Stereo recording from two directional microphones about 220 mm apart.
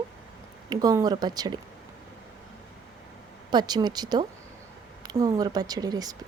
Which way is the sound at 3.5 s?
20° right (ahead or behind).